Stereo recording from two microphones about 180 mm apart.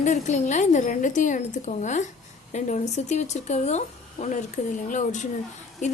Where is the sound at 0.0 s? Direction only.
40° left (ahead or behind).